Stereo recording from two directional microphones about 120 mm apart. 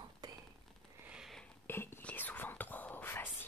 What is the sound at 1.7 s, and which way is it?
Whispering, 20° left (ahead or behind).